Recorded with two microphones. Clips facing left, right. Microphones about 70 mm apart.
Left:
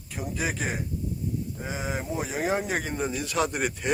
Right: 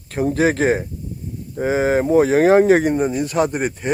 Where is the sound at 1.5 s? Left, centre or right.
Right.